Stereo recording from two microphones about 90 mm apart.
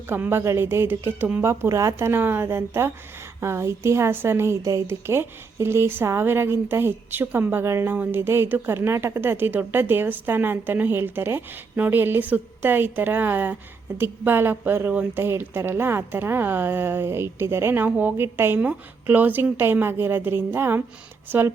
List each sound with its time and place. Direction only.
0.1 s a woman's voice: 25° right (ahead or behind)